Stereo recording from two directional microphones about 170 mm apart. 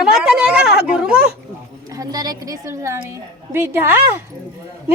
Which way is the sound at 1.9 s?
20° right (ahead or behind).